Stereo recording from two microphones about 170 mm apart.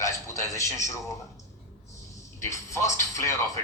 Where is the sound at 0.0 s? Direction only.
20° left (ahead or behind).